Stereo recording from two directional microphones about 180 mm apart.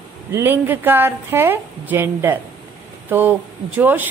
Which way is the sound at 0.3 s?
10° right (ahead or behind).